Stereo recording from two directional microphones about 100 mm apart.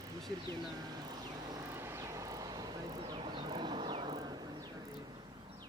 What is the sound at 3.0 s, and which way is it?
Vehicle, 50° right (ahead or behind).